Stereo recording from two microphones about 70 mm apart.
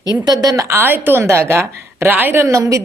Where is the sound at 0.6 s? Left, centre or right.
Right.